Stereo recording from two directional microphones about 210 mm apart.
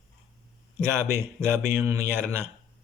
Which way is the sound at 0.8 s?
15° right (ahead or behind).